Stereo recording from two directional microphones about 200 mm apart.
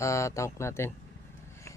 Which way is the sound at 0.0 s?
15° left (ahead or behind).